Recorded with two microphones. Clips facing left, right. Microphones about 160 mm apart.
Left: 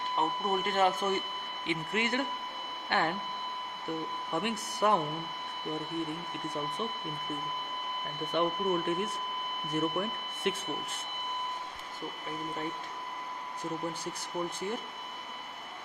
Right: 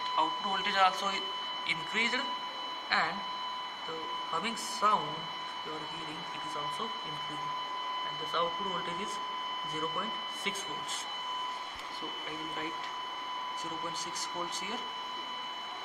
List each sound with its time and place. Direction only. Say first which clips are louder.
0.2 s speech: left 4 dB; 45° left (ahead or behind)
4.3 s speech: left 6 dB; 60° left (ahead or behind)
8.3 s speech: left 6 dB; 55° left (ahead or behind)